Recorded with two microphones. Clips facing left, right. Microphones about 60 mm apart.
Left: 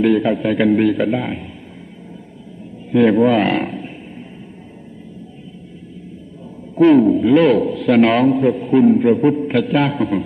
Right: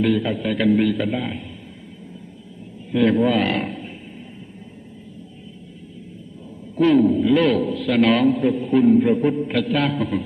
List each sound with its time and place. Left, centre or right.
0.0 s a man's voice: centre
2.9 s a man's voice: centre
3.3 s a man's voice: left
6.7 s a man's voice: centre
7.3 s a man's voice: centre
8.3 s a man's voice: centre
9.6 s a man's voice: centre